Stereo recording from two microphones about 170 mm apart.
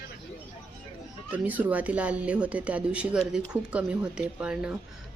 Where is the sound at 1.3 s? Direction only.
10° right (ahead or behind).